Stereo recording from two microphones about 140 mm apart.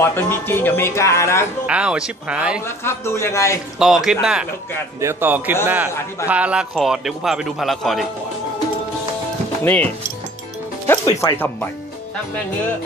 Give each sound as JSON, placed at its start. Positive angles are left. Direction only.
{"t": 0.0, "sound": "speech", "side_deg": 15}
{"t": 1.7, "sound": "speech", "side_deg": -5}
{"t": 2.6, "sound": "speech", "side_deg": 20}
{"t": 3.8, "sound": "speech", "side_deg": 0}
{"t": 9.6, "sound": "speech", "side_deg": 10}
{"t": 11.1, "sound": "speech", "side_deg": 20}